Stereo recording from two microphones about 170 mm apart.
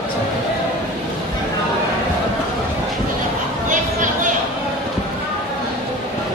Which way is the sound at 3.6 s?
50° right (ahead or behind).